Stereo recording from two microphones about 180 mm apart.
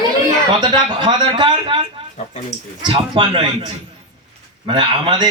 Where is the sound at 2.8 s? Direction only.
25° right (ahead or behind).